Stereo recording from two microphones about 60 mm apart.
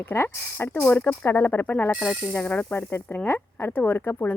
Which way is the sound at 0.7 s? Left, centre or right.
Left.